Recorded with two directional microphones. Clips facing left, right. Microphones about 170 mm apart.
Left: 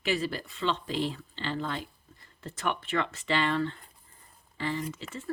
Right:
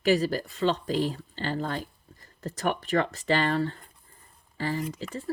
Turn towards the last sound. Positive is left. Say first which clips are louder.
# right 4 dB
turn(degrees=-40)  # may be behind; listen again after turning